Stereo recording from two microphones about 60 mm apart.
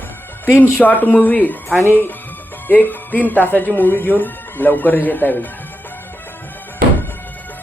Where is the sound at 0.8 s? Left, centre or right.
Left.